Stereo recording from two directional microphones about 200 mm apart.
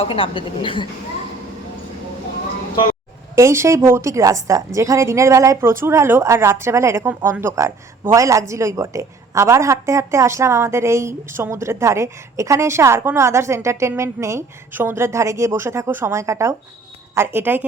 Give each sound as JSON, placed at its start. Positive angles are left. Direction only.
{"t": 0.0, "sound": "a woman's voice", "side_deg": 25}
{"t": 3.3, "sound": "speech", "side_deg": -15}